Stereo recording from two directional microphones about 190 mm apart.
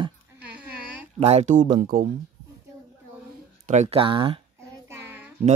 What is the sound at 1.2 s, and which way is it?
Speech, 35° right (ahead or behind).